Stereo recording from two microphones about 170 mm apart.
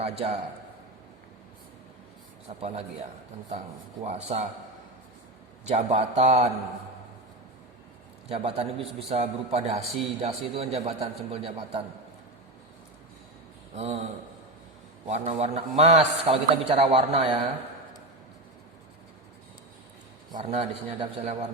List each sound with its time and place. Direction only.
0.0 s a man's voice: 40° right (ahead or behind)
2.5 s a man's voice: 40° right (ahead or behind)
4.0 s a man's voice: 40° right (ahead or behind)
5.6 s a man's voice: 40° right (ahead or behind)
8.3 s a man's voice: 35° right (ahead or behind)
13.7 s a man's voice: 40° right (ahead or behind)
15.2 s a man's voice: 40° right (ahead or behind)
20.4 s a man's voice: 35° right (ahead or behind)